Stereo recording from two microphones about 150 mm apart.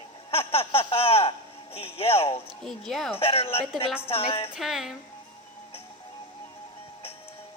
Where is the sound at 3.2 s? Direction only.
40° left (ahead or behind).